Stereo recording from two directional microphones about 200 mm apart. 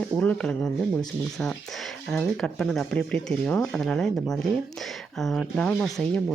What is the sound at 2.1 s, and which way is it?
Speech, 5° left (ahead or behind).